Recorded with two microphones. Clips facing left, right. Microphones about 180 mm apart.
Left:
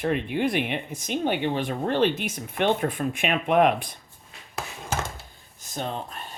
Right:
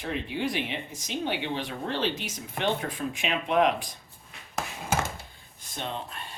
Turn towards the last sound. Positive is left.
turn(degrees=45)  # may be behind; listen again after turning